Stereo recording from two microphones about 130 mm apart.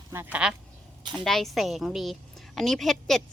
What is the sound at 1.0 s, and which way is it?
Speech, 35° right (ahead or behind).